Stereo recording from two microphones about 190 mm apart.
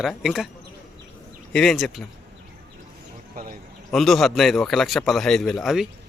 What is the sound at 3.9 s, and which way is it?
A man's voice, centre (ahead or behind).